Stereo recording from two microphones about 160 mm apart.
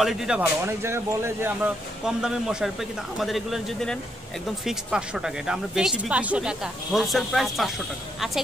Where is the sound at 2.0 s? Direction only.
5° right (ahead or behind).